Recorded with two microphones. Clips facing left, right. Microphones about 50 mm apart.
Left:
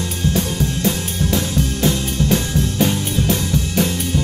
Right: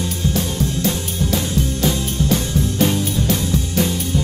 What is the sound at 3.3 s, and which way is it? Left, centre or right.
Music, left.